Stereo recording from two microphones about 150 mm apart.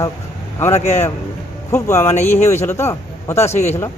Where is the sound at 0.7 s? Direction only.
45° left (ahead or behind).